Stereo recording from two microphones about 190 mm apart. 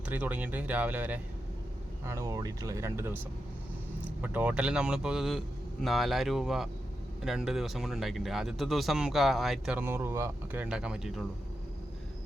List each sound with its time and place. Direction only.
0.1 s speech: 10° right (ahead or behind)